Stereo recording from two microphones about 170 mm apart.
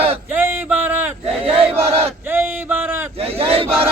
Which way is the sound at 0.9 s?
10° right (ahead or behind).